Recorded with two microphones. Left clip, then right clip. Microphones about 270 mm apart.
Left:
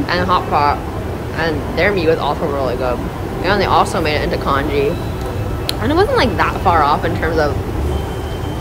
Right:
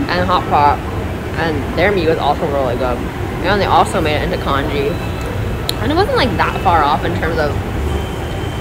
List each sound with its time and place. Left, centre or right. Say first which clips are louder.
0.1 s speech: right 1 dB; centre
3.4 s speech: right 1 dB; centre
5.9 s speech: left 1 dB; left